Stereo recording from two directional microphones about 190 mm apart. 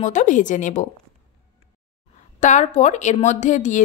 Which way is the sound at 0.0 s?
40° left (ahead or behind).